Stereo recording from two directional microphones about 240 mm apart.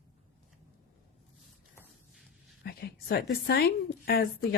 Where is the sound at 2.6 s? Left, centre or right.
Left.